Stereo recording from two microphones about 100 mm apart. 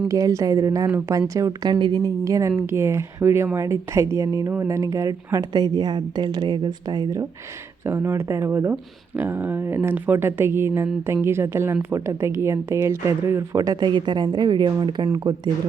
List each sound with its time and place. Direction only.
0.1 s a woman's voice: 35° right (ahead or behind)
7.9 s speech: 25° right (ahead or behind)
13.6 s a woman's voice: 40° right (ahead or behind)